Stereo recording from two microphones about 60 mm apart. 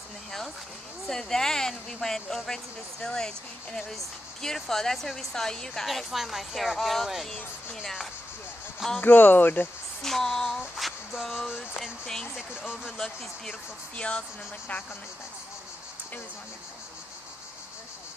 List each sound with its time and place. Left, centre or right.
1.0 s a woman's voice: centre
9.0 s speech: left
10.0 s a sound: centre
10.6 s music: centre
11.8 s a woman's voice: centre